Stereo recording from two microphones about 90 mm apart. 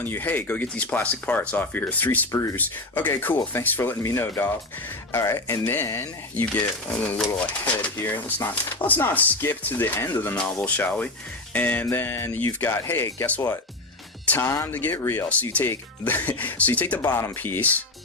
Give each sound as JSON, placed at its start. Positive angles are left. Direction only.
{"t": 0.0, "sound": "speech", "side_deg": 20}